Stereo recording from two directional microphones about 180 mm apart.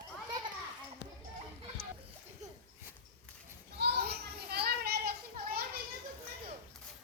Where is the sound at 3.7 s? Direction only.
65° right (ahead or behind).